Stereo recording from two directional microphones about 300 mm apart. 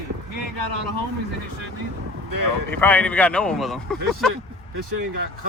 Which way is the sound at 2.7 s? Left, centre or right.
Centre.